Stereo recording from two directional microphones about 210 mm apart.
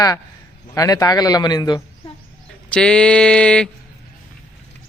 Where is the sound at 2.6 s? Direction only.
5° left (ahead or behind).